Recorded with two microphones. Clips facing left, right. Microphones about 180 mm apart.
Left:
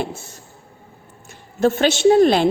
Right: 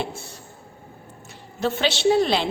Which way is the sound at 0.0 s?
45° left (ahead or behind).